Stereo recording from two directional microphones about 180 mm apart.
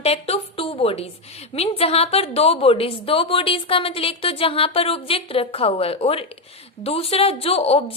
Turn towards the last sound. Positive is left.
turn(degrees=30)  # may be behind; listen again after turning